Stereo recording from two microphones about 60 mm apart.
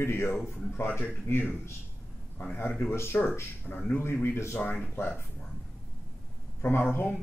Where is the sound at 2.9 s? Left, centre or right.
Left.